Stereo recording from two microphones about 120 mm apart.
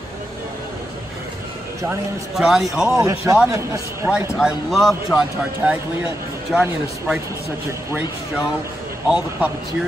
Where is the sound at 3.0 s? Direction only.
25° right (ahead or behind).